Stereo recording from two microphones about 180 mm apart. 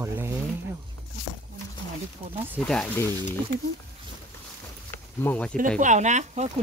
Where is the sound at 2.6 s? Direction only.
5° left (ahead or behind).